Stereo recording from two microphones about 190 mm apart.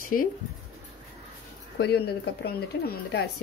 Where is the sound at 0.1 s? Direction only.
45° left (ahead or behind).